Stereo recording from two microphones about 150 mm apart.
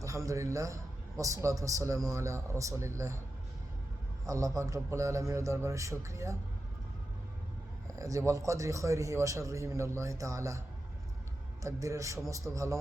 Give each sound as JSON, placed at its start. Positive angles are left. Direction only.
{"t": 0.0, "sound": "a man's voice", "side_deg": -20}
{"t": 4.3, "sound": "a man's voice", "side_deg": -20}
{"t": 7.9, "sound": "a man's voice", "side_deg": -20}
{"t": 11.6, "sound": "a man's voice", "side_deg": -20}